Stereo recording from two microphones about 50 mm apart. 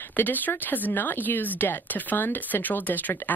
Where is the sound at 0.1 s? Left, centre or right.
Left.